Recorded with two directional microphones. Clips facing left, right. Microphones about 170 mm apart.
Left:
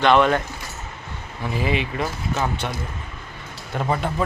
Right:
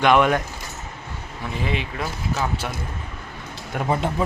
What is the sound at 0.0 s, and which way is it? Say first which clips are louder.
Speech: even; 10° right (ahead or behind).